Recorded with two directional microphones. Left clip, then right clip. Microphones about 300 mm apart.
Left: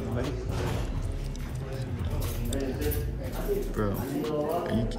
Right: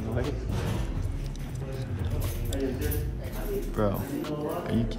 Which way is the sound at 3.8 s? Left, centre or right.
Centre.